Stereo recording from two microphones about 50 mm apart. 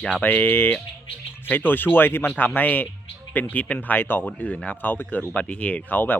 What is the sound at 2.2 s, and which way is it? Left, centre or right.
Speech, left.